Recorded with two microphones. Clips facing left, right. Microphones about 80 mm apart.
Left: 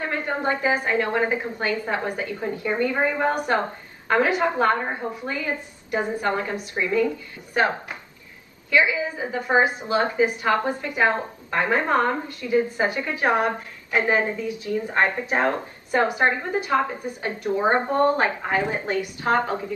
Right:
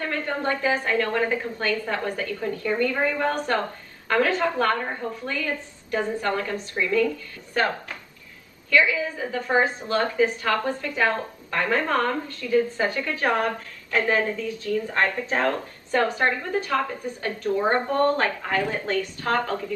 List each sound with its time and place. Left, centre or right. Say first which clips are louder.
0.0 s a woman's voice: left 1 dB; left